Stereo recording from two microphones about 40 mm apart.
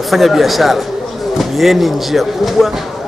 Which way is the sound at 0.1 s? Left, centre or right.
Centre.